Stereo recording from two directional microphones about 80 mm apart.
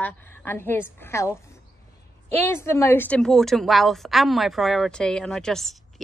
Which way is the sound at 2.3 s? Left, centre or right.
Left.